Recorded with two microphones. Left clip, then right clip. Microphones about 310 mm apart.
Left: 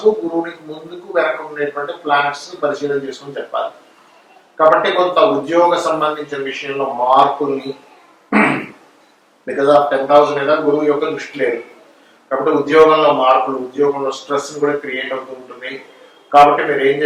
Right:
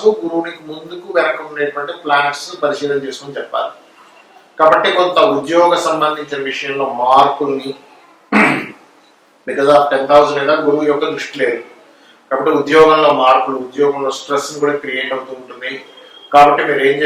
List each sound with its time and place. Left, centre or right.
0.0 s speech: left
1.2 s speech: centre
4.8 s a man's voice: centre
6.8 s speech: left
7.4 s speech: centre
8.3 s fart: centre
9.5 s a man's voice: centre